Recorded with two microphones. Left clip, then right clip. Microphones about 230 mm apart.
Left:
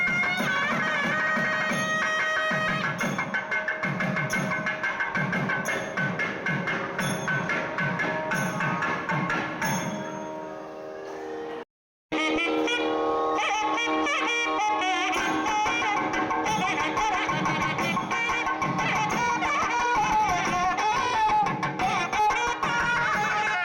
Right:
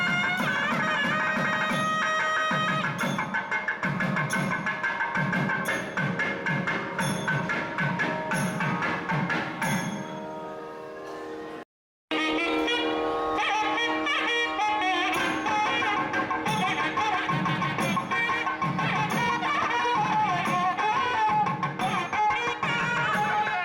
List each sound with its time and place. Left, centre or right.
0.0 s music: left
4.6 s music: left
12.1 s music: left